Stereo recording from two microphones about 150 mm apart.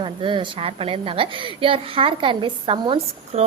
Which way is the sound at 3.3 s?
45° right (ahead or behind).